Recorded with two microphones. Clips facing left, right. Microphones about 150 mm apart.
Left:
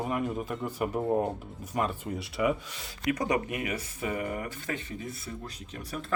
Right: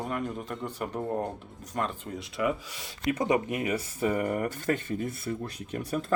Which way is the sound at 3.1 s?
25° right (ahead or behind).